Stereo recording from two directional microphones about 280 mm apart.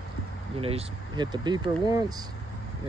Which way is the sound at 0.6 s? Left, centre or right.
Right.